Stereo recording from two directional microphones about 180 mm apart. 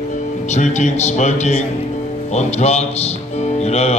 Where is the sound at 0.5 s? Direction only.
40° left (ahead or behind).